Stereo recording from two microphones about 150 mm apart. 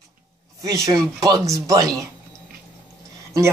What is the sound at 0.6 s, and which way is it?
Speech, 25° right (ahead or behind).